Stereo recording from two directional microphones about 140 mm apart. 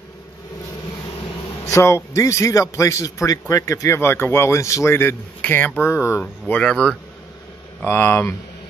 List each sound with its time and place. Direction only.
1.7 s a man's voice: 20° left (ahead or behind)
6.4 s speech: 10° left (ahead or behind)
7.8 s speech: 15° left (ahead or behind)